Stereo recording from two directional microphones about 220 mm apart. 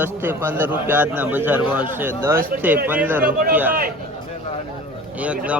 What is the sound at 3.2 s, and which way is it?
Speech, 40° right (ahead or behind).